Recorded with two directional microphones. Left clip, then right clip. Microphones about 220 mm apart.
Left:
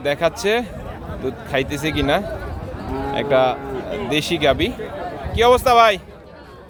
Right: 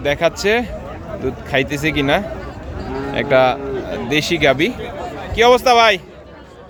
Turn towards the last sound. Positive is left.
turn(degrees=-5)  # may be behind; listen again after turning